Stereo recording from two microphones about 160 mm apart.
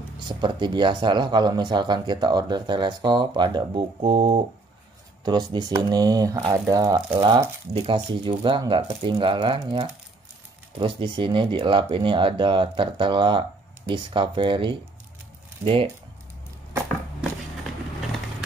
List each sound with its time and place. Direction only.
0.3 s speech: 30° right (ahead or behind)
10.8 s speech: 30° right (ahead or behind)